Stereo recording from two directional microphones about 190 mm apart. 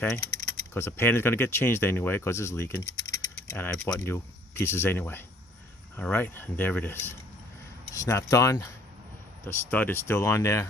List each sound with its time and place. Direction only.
0.7 s speech: 10° left (ahead or behind)